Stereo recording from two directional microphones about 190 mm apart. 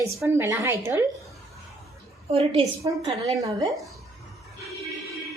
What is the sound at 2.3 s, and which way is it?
Speech, 30° right (ahead or behind).